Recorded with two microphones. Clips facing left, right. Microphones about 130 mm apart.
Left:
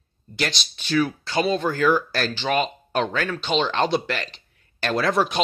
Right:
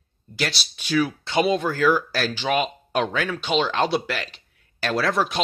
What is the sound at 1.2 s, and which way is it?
Speech, 20° right (ahead or behind).